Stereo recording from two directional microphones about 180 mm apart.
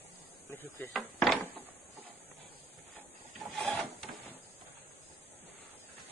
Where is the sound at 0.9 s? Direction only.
Centre (ahead or behind).